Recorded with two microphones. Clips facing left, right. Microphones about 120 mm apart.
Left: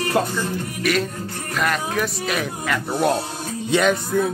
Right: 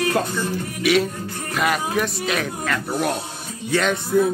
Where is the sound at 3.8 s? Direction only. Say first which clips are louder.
Right 1 dB; centre (ahead or behind).